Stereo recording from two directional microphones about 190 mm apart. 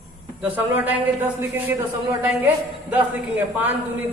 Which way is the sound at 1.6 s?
10° right (ahead or behind).